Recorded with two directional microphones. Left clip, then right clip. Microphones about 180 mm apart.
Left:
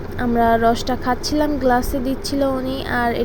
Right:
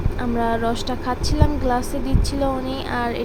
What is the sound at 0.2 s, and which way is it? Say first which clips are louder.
Speech: left 6 dB; 20° left (ahead or behind).